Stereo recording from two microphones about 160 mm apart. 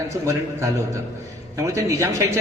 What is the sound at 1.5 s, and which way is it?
Speech, 20° right (ahead or behind).